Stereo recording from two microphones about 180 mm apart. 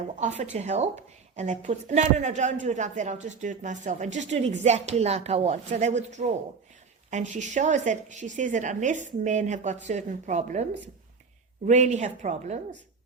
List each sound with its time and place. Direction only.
0.2 s a woman's voice: 40° right (ahead or behind)